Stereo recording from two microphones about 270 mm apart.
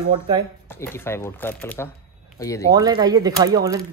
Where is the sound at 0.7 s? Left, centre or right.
Centre.